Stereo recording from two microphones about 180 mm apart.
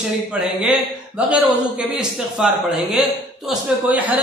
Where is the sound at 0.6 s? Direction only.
5° right (ahead or behind).